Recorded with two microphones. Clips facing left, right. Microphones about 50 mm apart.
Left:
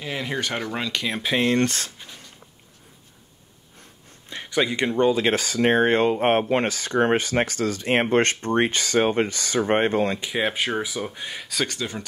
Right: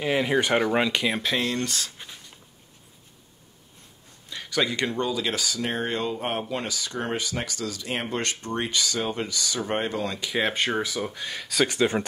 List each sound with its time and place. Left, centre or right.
0.0 s speech: centre
1.2 s speech: centre
1.5 s speech: left
4.3 s speech: left
10.3 s speech: centre
11.8 s speech: right